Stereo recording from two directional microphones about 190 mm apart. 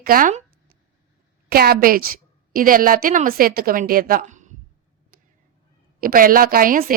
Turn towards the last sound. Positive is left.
turn(degrees=-50)  # may be behind; listen again after turning